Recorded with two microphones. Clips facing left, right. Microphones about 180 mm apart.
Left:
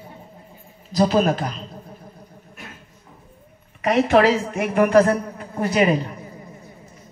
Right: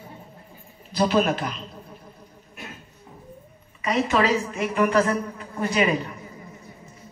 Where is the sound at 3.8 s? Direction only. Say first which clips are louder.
Left 6 dB; 60° left (ahead or behind); by 6.2 s 40° left (ahead or behind).